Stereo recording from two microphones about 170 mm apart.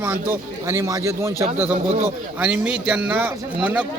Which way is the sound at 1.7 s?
40° right (ahead or behind).